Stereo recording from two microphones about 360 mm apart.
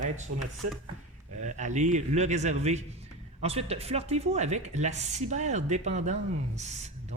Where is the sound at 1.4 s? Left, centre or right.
Centre.